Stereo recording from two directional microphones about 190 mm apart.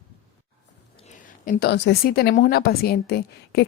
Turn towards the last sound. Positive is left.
turn(degrees=60)  # may be behind; listen again after turning